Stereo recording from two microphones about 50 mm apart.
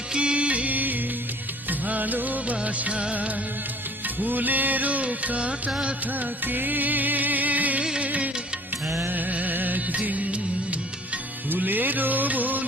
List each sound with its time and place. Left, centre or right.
0.1 s music: right
6.1 s music: right
8.9 s music: right
11.4 s music: right